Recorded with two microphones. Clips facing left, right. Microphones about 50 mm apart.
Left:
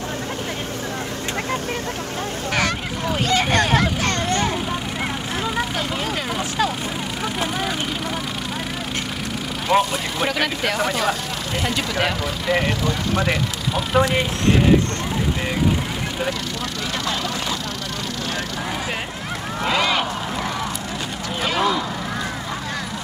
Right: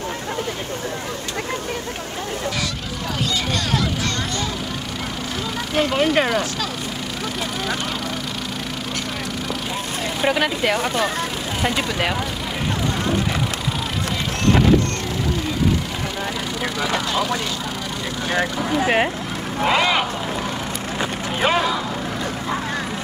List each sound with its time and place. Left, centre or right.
3.3 s vehicle: left
5.8 s vehicle: right
10.2 s speech: centre
19.6 s speech: centre